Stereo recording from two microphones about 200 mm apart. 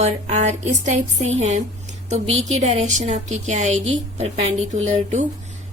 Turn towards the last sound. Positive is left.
turn(degrees=-35)  # may be behind; listen again after turning